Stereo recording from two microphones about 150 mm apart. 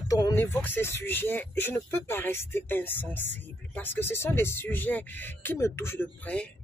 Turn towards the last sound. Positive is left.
turn(degrees=10)  # may be behind; listen again after turning